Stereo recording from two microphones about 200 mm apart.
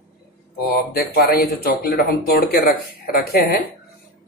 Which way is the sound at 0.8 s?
50° left (ahead or behind).